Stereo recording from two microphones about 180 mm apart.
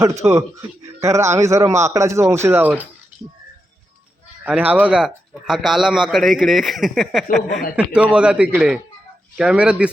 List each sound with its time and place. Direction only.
0.0 s speech: 15° right (ahead or behind)
4.4 s a man's voice: 10° right (ahead or behind)